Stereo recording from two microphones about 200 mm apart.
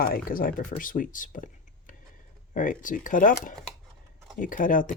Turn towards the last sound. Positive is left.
turn(degrees=40)  # may be behind; listen again after turning